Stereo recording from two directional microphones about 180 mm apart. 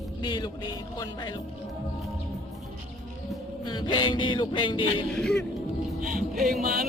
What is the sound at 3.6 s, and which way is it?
Music, 25° left (ahead or behind).